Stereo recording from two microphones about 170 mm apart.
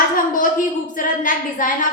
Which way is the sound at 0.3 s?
55° left (ahead or behind).